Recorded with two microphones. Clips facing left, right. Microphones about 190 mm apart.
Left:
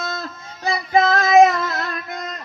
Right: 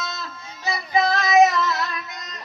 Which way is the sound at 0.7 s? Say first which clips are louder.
Left 4 dB; 50° left (ahead or behind).